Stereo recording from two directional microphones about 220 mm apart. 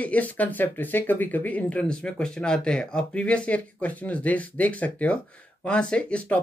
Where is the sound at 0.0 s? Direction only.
5° left (ahead or behind).